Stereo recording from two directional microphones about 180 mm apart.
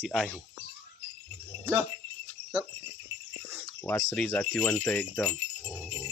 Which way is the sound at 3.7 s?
15° left (ahead or behind).